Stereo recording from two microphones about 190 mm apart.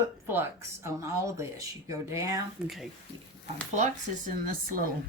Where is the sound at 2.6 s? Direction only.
Centre (ahead or behind).